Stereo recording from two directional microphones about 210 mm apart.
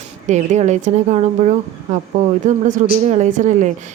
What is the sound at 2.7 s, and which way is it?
Speech, 35° right (ahead or behind).